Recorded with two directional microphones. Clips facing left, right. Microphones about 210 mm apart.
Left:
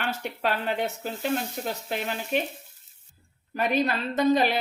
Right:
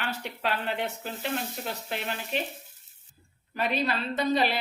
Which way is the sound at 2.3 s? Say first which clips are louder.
Left 5 dB; 50° left (ahead or behind).